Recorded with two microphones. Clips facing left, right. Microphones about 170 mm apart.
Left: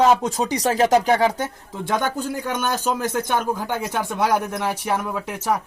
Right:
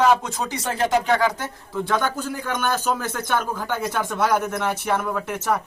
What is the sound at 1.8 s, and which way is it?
Speech, 20° left (ahead or behind).